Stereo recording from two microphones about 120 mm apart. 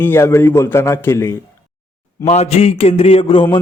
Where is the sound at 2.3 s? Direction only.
60° left (ahead or behind).